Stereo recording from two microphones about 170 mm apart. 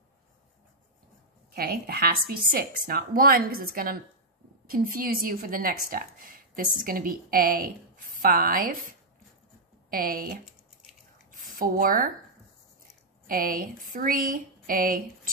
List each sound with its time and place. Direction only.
1.5 s a woman's voice: 60° right (ahead or behind)
9.8 s a woman's voice: 60° right (ahead or behind)
11.4 s speech: 55° right (ahead or behind)
13.3 s a woman's voice: 55° right (ahead or behind)